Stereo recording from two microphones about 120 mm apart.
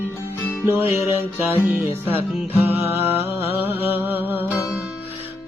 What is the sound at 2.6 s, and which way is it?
Music, 55° left (ahead or behind).